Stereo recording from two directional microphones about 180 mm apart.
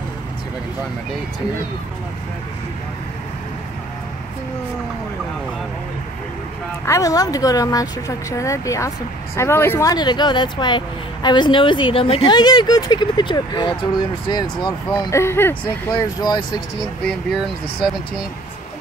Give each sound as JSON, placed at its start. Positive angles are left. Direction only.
{"t": 6.9, "sound": "speech", "side_deg": 20}